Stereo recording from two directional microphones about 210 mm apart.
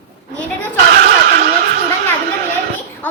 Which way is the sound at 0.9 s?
45° right (ahead or behind).